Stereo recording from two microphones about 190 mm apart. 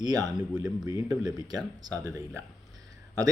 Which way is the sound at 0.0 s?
20° right (ahead or behind).